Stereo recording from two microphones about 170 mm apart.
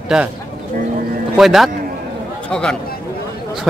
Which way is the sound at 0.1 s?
Centre (ahead or behind).